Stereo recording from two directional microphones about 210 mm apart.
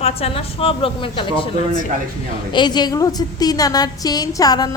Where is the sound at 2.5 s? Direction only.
20° left (ahead or behind).